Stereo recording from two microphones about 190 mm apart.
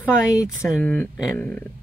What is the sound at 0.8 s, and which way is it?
Speech, 10° left (ahead or behind).